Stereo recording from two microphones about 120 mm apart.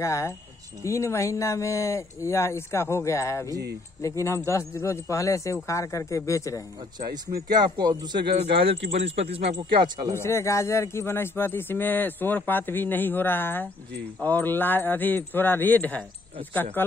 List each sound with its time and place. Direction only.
0.0 s speech: 25° left (ahead or behind)
7.4 s speech: 35° right (ahead or behind); by 9.6 s 60° right (ahead or behind)
10.1 s speech: 20° left (ahead or behind)